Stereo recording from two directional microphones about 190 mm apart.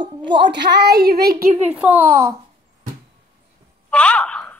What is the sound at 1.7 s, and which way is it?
Speech, 5° right (ahead or behind).